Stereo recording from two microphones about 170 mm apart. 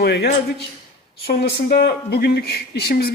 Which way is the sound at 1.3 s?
75° left (ahead or behind).